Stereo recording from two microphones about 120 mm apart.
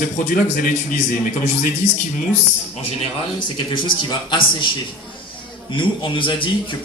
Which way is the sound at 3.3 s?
40° left (ahead or behind).